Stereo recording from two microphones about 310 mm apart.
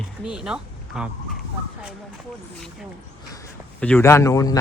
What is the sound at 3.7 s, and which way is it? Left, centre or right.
Speech, centre.